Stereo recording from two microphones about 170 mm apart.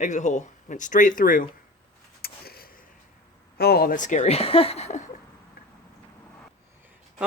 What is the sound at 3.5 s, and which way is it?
Speech, 65° left (ahead or behind).